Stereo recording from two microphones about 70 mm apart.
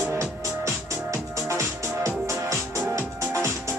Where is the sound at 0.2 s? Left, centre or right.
Right.